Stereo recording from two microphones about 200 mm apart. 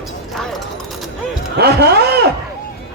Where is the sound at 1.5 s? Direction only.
55° right (ahead or behind).